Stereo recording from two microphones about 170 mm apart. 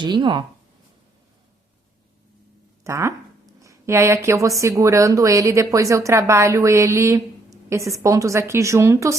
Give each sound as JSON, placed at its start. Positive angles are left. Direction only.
{"t": 0.0, "sound": "speech", "side_deg": -30}
{"t": 2.8, "sound": "speech", "side_deg": -15}